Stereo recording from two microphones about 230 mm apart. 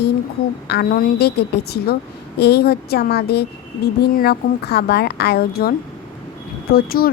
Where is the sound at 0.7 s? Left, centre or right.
Left.